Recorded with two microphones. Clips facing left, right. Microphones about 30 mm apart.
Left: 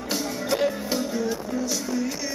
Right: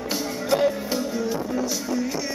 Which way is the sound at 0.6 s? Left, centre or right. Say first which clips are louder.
Right 1 dB; centre.